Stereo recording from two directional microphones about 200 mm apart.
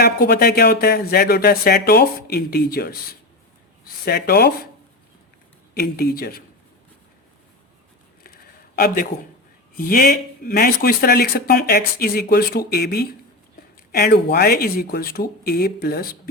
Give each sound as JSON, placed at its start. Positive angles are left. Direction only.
{"t": 0.0, "sound": "speech", "side_deg": 50}
{"t": 5.8, "sound": "speech", "side_deg": 50}
{"t": 9.7, "sound": "speech", "side_deg": 45}